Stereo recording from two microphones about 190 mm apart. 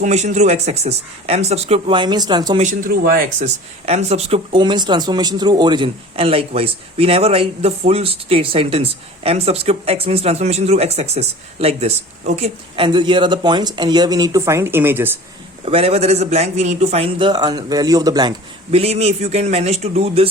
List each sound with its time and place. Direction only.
0.0 s a man's voice: 40° right (ahead or behind); by 2.6 s 20° right (ahead or behind)
2.6 s speech: 45° right (ahead or behind)
3.8 s speech: 35° right (ahead or behind); by 15.2 s 10° right (ahead or behind)
15.6 s a man's voice: 30° right (ahead or behind)
18.7 s a man's voice: 35° right (ahead or behind)